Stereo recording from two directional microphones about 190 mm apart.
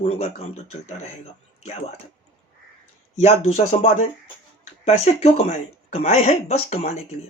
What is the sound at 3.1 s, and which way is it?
Speech, 35° left (ahead or behind).